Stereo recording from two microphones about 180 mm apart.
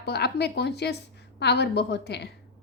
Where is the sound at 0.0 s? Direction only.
65° left (ahead or behind).